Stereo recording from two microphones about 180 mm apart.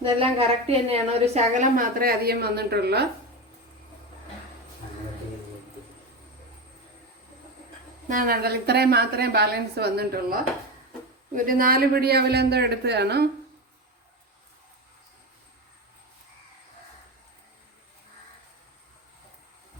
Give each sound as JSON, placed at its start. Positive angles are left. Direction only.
{"t": 0.0, "sound": "a woman's voice", "side_deg": -30}
{"t": 8.0, "sound": "a woman's voice", "side_deg": -50}